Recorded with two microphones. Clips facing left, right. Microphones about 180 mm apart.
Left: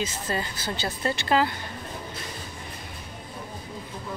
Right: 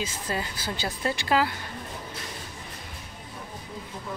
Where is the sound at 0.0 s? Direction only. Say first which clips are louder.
Left 2 dB; 10° right (ahead or behind).